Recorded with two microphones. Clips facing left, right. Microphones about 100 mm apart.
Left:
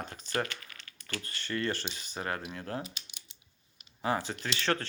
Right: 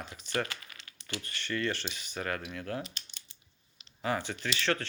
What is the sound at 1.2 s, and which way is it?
Speech, 35° left (ahead or behind).